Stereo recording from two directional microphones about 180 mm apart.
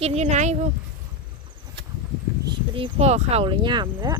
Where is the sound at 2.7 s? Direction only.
30° right (ahead or behind).